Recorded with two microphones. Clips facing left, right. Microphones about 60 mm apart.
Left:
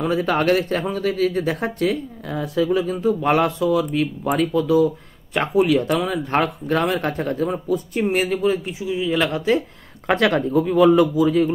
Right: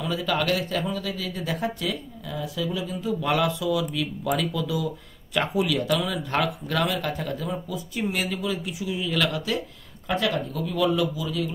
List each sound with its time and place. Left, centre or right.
0.0 s a man's voice: left
8.8 s speech: left
10.0 s speech: left
10.7 s a man's voice: left